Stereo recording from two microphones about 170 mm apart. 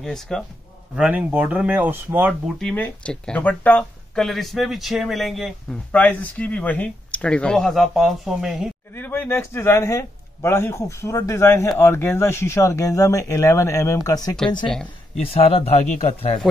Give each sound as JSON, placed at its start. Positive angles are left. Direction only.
{"t": 0.0, "sound": "speech", "side_deg": 5}
{"t": 0.9, "sound": "speech", "side_deg": -5}
{"t": 2.6, "sound": "speech", "side_deg": 10}
{"t": 8.9, "sound": "a man's voice", "side_deg": 10}
{"t": 15.1, "sound": "speech", "side_deg": 35}